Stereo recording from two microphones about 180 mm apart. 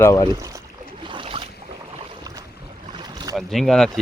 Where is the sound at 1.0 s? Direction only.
25° right (ahead or behind).